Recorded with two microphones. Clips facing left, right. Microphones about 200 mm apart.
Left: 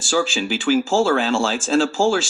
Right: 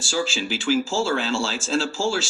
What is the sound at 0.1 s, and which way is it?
Speech, 50° left (ahead or behind).